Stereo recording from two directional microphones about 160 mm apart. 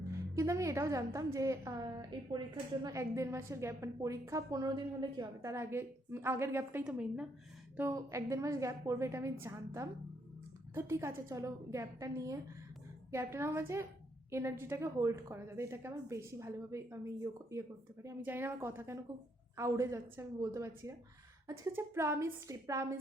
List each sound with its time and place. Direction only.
0.1 s a woman's voice: 20° right (ahead or behind)
7.8 s a woman's voice: 20° right (ahead or behind)